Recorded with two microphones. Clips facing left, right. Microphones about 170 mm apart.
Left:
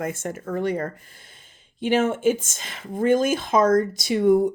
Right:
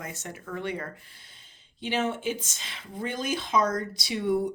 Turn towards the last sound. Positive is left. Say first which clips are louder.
# left 9 dB
turn(degrees=45)  # may be behind; listen again after turning